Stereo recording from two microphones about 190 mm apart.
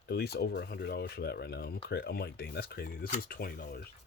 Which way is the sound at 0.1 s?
60° left (ahead or behind).